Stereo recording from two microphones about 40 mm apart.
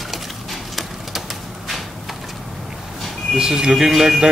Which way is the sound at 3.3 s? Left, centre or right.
Centre.